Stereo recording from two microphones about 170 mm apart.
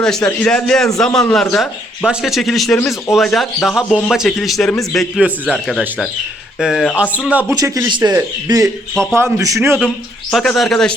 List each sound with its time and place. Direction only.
0.0 s a man's voice: 5° left (ahead or behind)
7.5 s a man's voice: 20° right (ahead or behind)
10.3 s speech: centre (ahead or behind)